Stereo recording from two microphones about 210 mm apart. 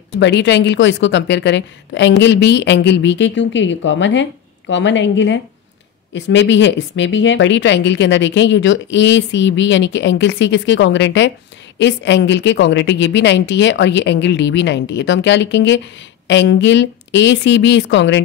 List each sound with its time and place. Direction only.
0.2 s a woman's voice: 55° left (ahead or behind)